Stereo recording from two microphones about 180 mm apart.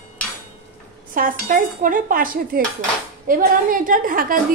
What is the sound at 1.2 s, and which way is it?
A woman's voice, 50° right (ahead or behind).